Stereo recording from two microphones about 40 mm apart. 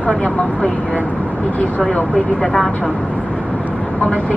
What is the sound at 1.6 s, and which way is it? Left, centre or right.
Speech, left.